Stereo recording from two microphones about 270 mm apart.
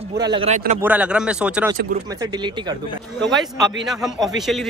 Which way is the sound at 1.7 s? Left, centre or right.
Right.